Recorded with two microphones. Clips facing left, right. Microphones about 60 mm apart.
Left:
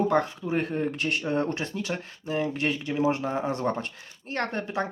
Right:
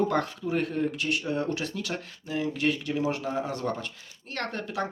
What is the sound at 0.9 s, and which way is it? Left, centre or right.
Speech, left.